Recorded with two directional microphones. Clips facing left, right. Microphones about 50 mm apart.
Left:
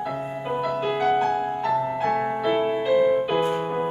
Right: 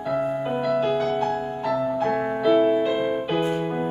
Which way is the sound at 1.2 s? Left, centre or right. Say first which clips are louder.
Left 2 dB; left.